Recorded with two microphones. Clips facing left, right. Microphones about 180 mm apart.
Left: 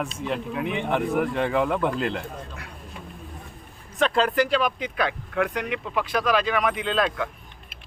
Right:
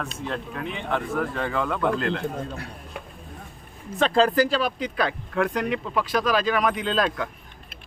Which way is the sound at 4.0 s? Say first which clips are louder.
Right 2 dB; 35° right (ahead or behind).